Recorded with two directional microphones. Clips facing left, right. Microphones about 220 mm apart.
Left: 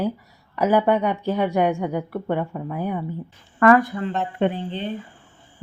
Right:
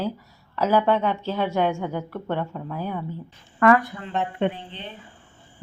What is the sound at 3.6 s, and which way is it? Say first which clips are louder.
Speech: left 2 dB; 40° left (ahead or behind).